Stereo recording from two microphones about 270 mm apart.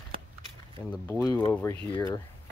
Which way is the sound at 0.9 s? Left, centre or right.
Centre.